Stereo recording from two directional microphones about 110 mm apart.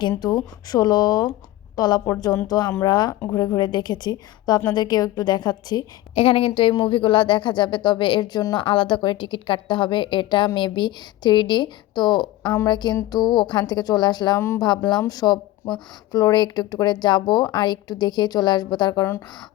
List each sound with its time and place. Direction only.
0.2 s a woman's voice: 40° left (ahead or behind)
6.1 s a woman's voice: 60° left (ahead or behind); by 8.6 s 40° left (ahead or behind)
8.6 s a woman's voice: 50° left (ahead or behind)